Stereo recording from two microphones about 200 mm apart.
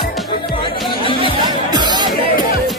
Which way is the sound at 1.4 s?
20° right (ahead or behind).